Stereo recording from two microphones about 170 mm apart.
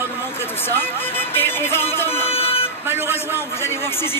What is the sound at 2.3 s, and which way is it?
Vehicle, 35° left (ahead or behind).